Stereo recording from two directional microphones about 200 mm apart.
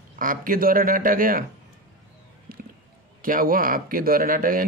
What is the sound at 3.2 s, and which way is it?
Speech, 45° right (ahead or behind).